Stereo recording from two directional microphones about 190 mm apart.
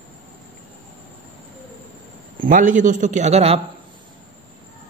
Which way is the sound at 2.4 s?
45° right (ahead or behind).